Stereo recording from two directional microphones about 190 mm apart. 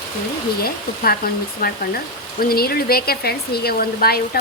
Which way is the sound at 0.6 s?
50° left (ahead or behind).